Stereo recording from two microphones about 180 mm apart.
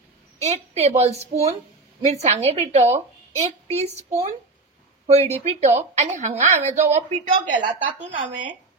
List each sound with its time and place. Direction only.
0.4 s a woman's voice: 35° right (ahead or behind)